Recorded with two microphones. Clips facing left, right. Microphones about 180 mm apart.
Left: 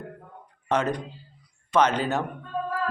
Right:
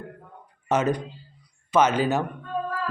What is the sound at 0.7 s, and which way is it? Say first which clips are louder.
Speech: right 2 dB; 5° right (ahead or behind).